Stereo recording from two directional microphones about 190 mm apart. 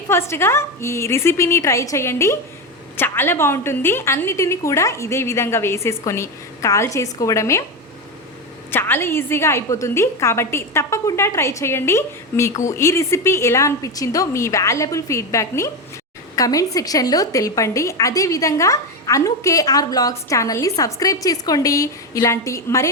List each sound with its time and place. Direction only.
0.1 s a woman's voice: 15° left (ahead or behind)
8.7 s a woman's voice: 10° left (ahead or behind)